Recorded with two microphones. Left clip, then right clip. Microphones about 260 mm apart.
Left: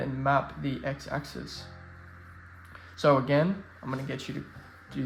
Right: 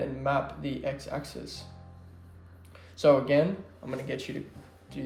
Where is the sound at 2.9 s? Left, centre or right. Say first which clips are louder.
Right 2 dB; left.